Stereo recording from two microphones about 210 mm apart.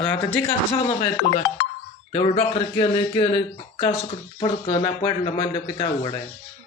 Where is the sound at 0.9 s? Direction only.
25° left (ahead or behind).